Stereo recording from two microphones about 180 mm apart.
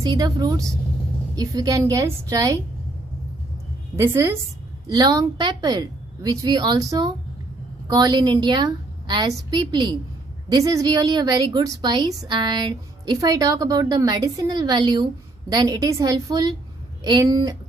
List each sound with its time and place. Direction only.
0.0 s a woman's voice: 20° right (ahead or behind)
3.9 s a woman's voice: 15° right (ahead or behind)